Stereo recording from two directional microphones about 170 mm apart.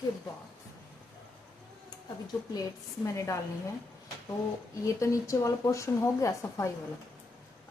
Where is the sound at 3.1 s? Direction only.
15° left (ahead or behind).